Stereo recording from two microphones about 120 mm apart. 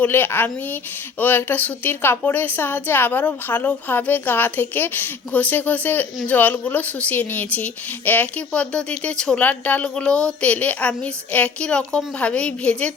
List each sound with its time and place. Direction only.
0.0 s a woman's voice: 15° left (ahead or behind)